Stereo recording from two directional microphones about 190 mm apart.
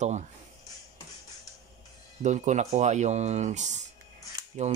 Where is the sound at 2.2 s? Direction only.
40° right (ahead or behind).